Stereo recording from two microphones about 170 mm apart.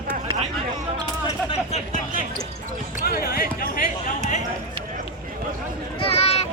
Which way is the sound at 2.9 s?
60° left (ahead or behind).